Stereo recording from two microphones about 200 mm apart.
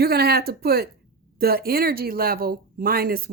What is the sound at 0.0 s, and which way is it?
Speech, 50° right (ahead or behind).